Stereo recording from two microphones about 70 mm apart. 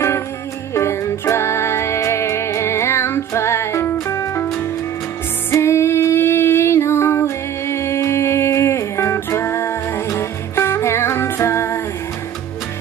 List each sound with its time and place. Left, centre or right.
0.7 s music: left
5.5 s female singing: left